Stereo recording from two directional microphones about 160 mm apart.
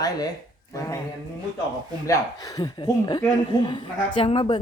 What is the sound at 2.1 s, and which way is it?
Speech, 20° left (ahead or behind).